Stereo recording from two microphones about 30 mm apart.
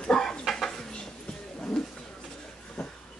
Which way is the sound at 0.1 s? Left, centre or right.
Centre.